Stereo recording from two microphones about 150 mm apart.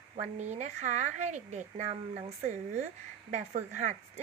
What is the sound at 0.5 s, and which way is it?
A woman's voice, 50° right (ahead or behind).